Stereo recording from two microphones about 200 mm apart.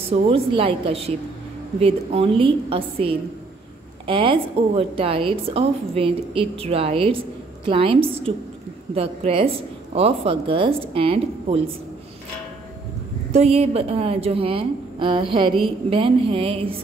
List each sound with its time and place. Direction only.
0.1 s a woman's voice: 30° right (ahead or behind)
13.3 s a woman's voice: 30° right (ahead or behind)